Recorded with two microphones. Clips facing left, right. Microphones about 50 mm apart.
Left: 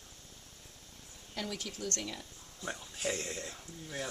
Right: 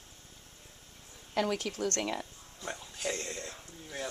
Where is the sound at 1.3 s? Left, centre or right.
Right.